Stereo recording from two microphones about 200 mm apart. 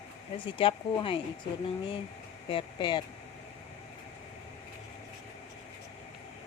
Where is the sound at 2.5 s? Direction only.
20° left (ahead or behind).